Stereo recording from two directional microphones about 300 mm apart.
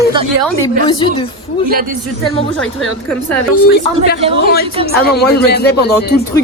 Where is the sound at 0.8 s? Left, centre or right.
Centre.